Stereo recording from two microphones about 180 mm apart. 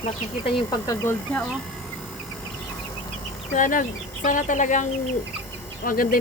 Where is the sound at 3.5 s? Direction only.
45° left (ahead or behind).